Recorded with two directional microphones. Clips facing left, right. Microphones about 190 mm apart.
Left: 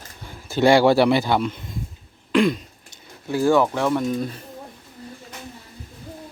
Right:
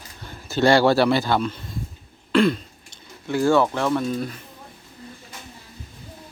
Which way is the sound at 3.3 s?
15° left (ahead or behind).